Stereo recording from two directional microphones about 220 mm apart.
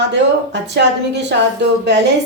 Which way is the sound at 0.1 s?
50° right (ahead or behind).